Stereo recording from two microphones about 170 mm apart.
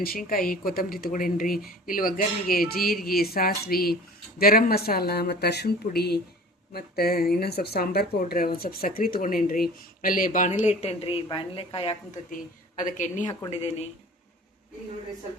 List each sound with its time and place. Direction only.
0.0 s speech: 60° left (ahead or behind); by 12.2 s 35° left (ahead or behind)
12.8 s speech: 45° left (ahead or behind)